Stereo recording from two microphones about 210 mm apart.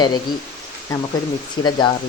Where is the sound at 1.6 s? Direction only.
20° left (ahead or behind).